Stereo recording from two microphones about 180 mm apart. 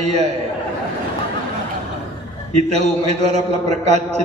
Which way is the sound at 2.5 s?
35° right (ahead or behind).